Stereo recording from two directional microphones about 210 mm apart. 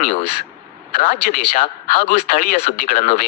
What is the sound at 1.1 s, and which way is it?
A man's voice, 45° left (ahead or behind).